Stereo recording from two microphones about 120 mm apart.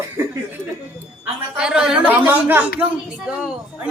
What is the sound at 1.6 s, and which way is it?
Speech, 5° right (ahead or behind).